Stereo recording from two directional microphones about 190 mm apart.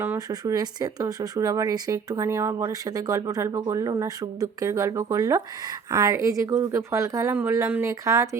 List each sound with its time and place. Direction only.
0.0 s speech: 15° right (ahead or behind)